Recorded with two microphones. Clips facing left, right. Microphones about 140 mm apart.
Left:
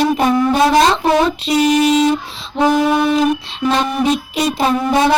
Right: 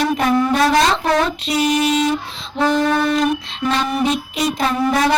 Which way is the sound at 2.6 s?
10° left (ahead or behind).